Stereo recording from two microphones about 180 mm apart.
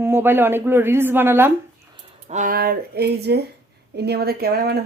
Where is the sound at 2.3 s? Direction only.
50° right (ahead or behind).